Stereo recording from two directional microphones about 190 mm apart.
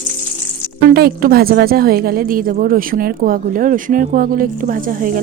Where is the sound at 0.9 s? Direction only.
50° right (ahead or behind).